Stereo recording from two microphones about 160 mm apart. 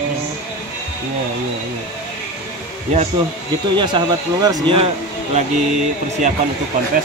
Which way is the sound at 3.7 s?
30° right (ahead or behind).